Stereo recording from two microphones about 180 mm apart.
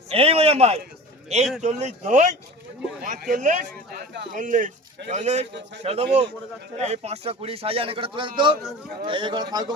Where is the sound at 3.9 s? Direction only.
75° right (ahead or behind).